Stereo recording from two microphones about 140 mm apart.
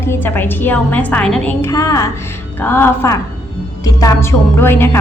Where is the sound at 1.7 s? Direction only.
20° left (ahead or behind).